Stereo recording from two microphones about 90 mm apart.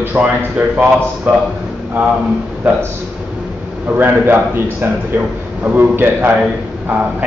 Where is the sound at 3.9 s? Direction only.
25° right (ahead or behind).